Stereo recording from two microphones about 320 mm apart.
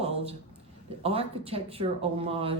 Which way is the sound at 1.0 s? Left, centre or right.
Centre.